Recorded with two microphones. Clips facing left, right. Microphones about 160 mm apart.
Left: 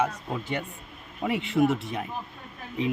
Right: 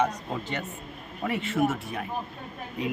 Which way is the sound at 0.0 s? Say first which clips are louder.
Right 1 dB; 10° left (ahead or behind).